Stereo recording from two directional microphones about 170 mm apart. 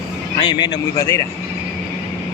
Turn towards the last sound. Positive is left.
turn(degrees=20)  # may be behind; listen again after turning